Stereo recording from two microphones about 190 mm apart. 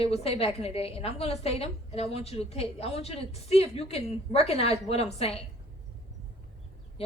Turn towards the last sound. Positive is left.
turn(degrees=30)  # may be behind; listen again after turning